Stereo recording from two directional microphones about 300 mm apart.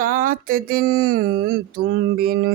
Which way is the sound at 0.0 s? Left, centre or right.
Right.